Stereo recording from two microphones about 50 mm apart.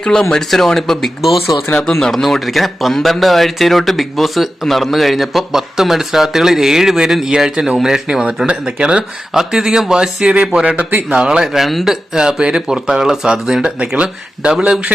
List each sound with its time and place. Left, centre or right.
0.0 s speech: centre
1.2 s speech: centre
1.9 s speech: centre
12.1 s speech: centre